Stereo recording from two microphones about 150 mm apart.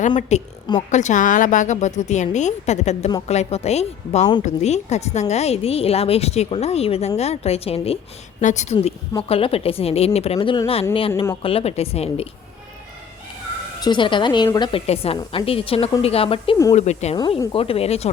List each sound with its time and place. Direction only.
0.2 s a woman's voice: 50° left (ahead or behind)
8.4 s a woman's voice: 55° left (ahead or behind)
13.8 s a woman's voice: 30° left (ahead or behind)
14.8 s a woman's voice: 40° left (ahead or behind)
17.2 s a woman's voice: 30° left (ahead or behind)